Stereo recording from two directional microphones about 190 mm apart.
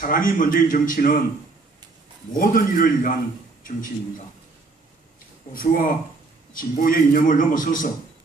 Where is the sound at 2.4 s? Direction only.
50° left (ahead or behind).